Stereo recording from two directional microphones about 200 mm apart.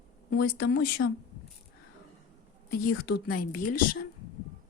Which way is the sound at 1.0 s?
90° left.